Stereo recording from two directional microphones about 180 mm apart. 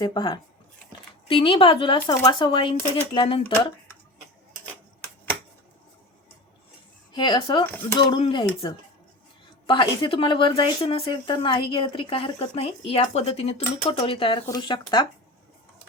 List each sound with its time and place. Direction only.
0.0 s a woman's voice: 25° left (ahead or behind)
7.1 s a woman's voice: 25° left (ahead or behind)
9.6 s a woman's voice: 25° left (ahead or behind)